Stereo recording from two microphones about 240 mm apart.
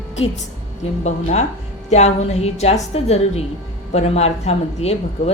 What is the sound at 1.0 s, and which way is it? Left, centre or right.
A woman's voice, left.